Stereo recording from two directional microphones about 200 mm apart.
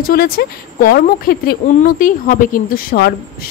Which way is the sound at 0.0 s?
50° left (ahead or behind).